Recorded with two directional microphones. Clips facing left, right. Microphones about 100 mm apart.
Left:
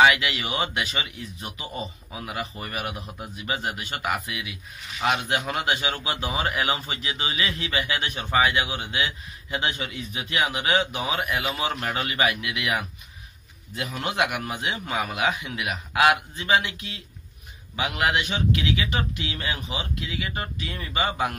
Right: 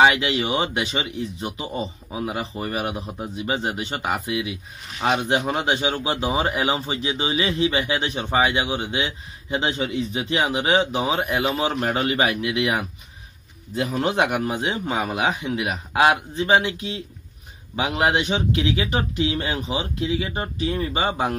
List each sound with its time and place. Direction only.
0.0 s a man's voice: 30° right (ahead or behind)